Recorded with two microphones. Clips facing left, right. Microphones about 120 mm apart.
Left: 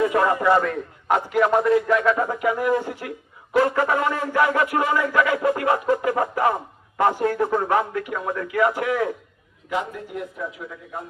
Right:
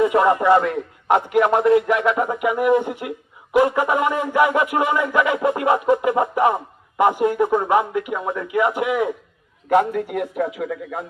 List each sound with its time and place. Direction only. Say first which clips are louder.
0.0 s a man's voice: right 3 dB; 20° right (ahead or behind)
1.6 s music: right 2 dB; 20° right (ahead or behind)
9.6 s a man's voice: right 10 dB; 60° right (ahead or behind); by 11.0 s 90° right